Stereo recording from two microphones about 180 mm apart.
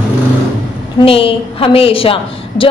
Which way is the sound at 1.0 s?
30° left (ahead or behind).